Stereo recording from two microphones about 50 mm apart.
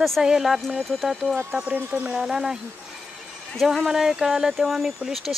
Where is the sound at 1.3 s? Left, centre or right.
Right.